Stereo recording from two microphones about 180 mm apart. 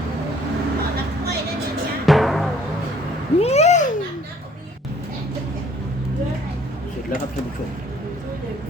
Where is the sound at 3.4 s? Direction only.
35° left (ahead or behind).